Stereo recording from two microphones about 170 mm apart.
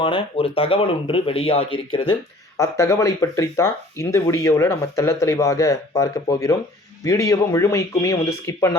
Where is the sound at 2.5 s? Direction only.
15° left (ahead or behind).